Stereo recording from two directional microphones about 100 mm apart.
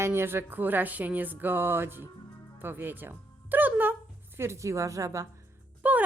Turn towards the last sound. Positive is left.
turn(degrees=-15)  # may be behind; listen again after turning